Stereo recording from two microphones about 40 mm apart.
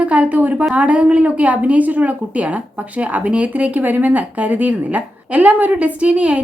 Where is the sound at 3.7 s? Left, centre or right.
Right.